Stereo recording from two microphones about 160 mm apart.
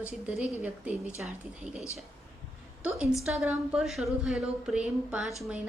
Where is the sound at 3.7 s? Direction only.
Centre (ahead or behind).